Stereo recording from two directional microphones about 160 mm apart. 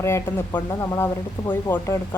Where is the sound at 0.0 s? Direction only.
15° left (ahead or behind).